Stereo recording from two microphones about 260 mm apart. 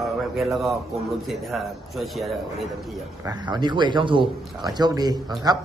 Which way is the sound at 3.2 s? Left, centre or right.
Centre.